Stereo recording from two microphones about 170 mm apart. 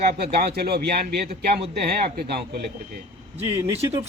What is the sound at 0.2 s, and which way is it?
Speech, 65° right (ahead or behind).